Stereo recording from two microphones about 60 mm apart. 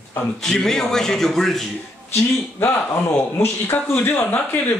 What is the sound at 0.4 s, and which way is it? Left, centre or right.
A man's voice, centre.